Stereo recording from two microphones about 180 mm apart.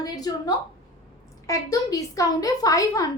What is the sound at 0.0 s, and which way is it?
A woman's voice, 20° left (ahead or behind).